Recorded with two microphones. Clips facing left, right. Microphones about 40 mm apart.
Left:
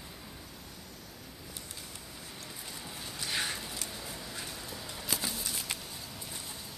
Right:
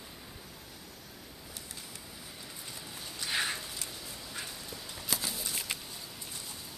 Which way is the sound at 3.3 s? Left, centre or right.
Centre.